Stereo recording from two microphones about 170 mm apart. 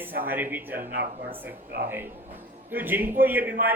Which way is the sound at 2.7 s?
10° right (ahead or behind).